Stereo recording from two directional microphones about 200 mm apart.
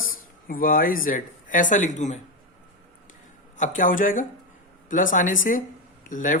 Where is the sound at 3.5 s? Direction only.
40° left (ahead or behind).